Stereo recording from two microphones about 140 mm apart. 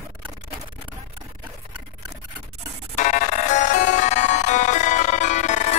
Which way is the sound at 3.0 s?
60° left (ahead or behind).